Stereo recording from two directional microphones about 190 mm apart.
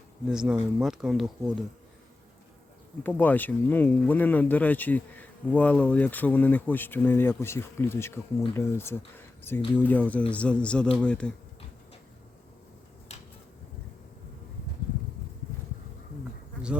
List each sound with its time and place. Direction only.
0.3 s speech: 5° right (ahead or behind)
3.0 s speech: 10° left (ahead or behind)
13.1 s a sound: 35° left (ahead or behind)